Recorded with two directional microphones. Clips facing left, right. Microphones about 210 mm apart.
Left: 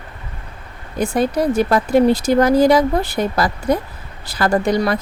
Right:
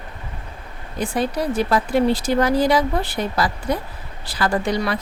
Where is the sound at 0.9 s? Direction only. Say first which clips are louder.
Left 5 dB; 45° left (ahead or behind).